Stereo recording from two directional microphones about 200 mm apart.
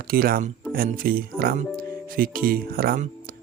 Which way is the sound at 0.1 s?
45° right (ahead or behind).